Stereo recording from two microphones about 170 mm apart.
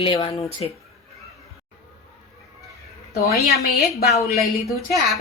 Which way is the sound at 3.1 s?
65° left (ahead or behind).